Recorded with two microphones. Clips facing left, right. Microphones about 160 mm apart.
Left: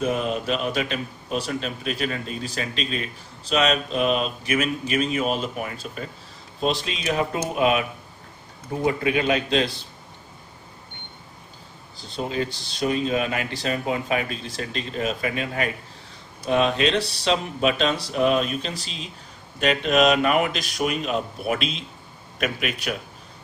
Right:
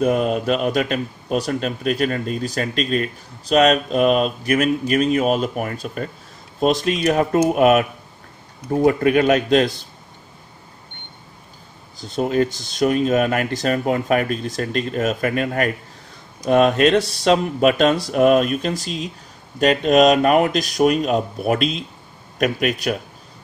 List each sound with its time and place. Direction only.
0.0 s speech: 45° right (ahead or behind)
8.8 s speech: 55° right (ahead or behind)
12.0 s a man's voice: 45° right (ahead or behind)